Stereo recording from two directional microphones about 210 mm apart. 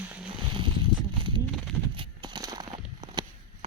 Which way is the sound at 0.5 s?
25° right (ahead or behind).